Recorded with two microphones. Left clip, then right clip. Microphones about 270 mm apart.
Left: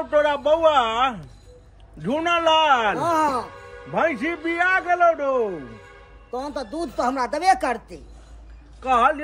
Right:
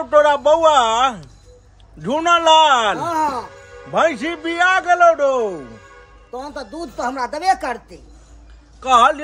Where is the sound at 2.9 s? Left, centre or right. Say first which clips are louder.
Right 1 dB; centre.